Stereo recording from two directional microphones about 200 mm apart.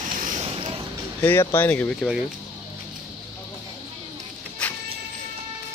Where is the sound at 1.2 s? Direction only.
10° left (ahead or behind).